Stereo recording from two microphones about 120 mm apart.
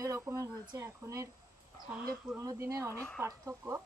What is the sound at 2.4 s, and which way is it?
Speech, 25° right (ahead or behind).